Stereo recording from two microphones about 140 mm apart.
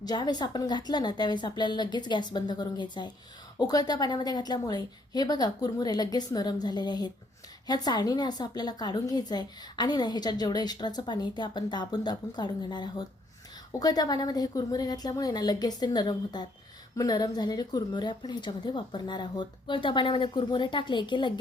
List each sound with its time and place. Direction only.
0.0 s a woman's voice: 30° left (ahead or behind)